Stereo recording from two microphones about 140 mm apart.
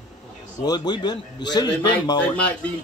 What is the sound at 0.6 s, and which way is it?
Speech, 30° left (ahead or behind).